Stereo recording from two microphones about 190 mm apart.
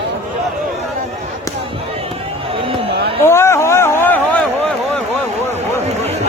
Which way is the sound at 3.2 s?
15° left (ahead or behind).